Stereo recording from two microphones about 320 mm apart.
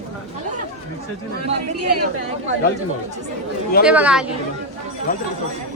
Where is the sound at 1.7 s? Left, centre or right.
Right.